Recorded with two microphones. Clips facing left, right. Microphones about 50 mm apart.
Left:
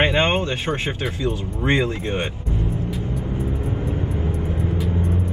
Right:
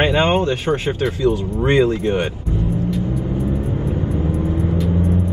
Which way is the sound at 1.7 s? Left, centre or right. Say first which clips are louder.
Right 5 dB; left.